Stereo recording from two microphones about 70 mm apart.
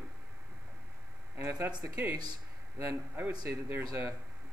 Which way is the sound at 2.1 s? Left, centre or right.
Right.